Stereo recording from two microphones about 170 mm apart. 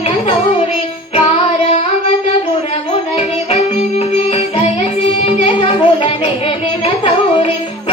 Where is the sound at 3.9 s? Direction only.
35° left (ahead or behind).